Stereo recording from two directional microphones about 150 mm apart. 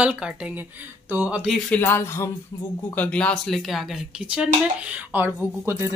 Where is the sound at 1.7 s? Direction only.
15° left (ahead or behind).